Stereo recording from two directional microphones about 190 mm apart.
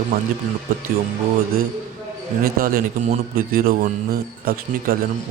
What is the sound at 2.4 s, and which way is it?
A man's voice, 50° right (ahead or behind).